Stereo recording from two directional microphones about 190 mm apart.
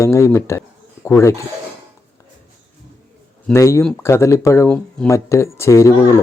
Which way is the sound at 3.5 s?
15° left (ahead or behind).